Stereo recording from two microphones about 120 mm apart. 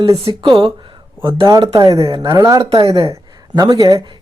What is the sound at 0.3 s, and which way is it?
A man's voice, 40° right (ahead or behind).